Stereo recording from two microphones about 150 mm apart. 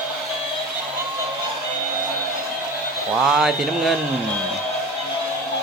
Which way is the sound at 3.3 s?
Centre (ahead or behind).